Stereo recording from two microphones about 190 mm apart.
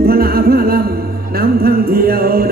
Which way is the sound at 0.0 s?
55° right (ahead or behind).